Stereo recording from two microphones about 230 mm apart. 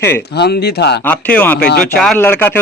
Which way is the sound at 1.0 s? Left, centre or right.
Centre.